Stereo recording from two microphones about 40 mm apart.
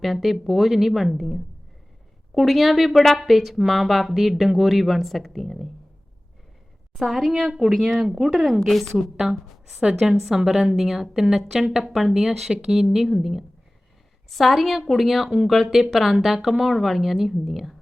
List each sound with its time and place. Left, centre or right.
0.0 s speech: centre
6.9 s speech: centre
8.6 s a woman's voice: centre